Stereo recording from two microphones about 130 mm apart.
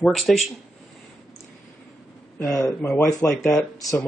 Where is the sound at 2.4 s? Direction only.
25° left (ahead or behind).